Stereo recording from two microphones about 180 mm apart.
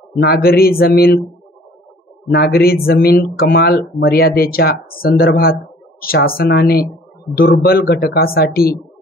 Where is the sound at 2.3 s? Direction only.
65° left (ahead or behind).